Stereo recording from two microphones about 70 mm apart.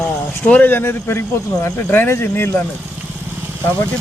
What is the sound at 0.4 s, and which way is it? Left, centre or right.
Speech, left.